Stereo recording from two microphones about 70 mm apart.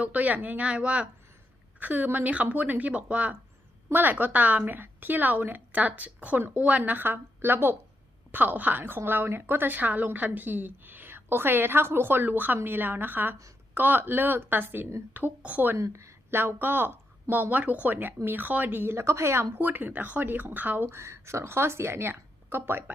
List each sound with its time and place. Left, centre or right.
0.0 s a woman's voice: right
15.7 s a woman's voice: right